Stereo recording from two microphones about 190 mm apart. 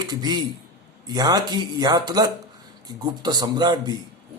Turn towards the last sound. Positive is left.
turn(degrees=-20)  # may be behind; listen again after turning